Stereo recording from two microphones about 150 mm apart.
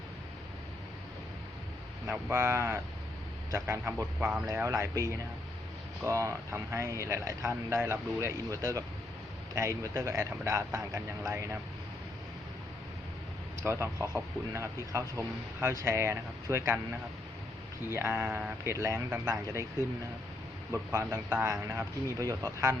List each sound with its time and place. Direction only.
2.0 s speech: 15° right (ahead or behind)
4.4 s speech: 20° right (ahead or behind)
13.6 s speech: 15° right (ahead or behind)
17.9 s speech: 15° right (ahead or behind)
20.7 s speech: 15° right (ahead or behind)